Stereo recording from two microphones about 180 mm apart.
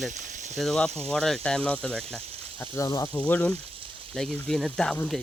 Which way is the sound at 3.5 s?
30° right (ahead or behind).